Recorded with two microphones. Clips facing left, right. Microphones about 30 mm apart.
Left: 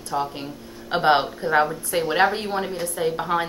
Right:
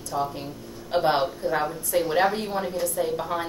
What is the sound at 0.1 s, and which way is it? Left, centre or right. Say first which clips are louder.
A woman's voice: left 2 dB; left.